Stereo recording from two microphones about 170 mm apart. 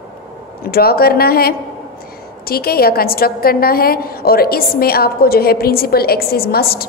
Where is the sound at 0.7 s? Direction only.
65° left (ahead or behind).